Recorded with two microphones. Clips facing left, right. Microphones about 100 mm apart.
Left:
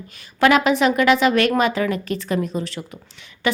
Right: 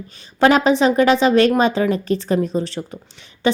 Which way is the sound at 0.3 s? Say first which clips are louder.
Right 2 dB; 30° right (ahead or behind).